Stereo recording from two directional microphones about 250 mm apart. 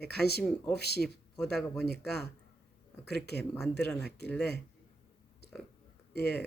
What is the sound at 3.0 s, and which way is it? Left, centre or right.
Speech, left.